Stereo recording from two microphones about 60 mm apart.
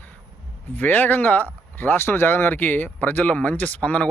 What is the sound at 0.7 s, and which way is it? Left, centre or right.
Speech, left.